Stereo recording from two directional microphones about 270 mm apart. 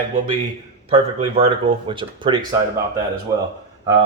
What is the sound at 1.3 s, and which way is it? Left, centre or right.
Speech, centre.